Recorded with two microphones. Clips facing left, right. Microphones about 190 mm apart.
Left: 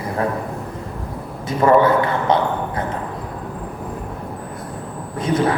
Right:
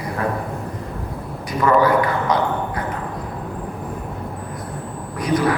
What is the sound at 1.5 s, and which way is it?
A man's voice, 25° left (ahead or behind).